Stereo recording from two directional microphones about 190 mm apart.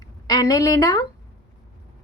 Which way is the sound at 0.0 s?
20° left (ahead or behind).